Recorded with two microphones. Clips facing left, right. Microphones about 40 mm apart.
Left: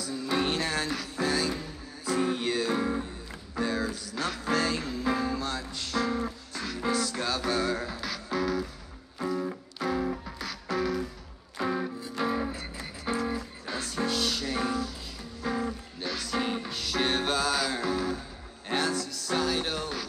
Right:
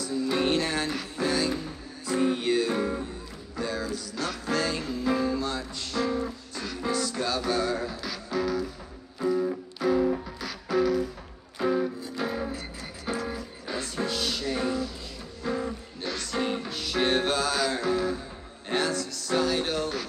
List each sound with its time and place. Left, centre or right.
0.0 s music: centre
0.7 s music: right
2.0 s music: centre